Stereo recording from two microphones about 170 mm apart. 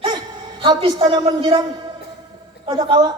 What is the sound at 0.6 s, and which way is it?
A woman's voice, 25° right (ahead or behind).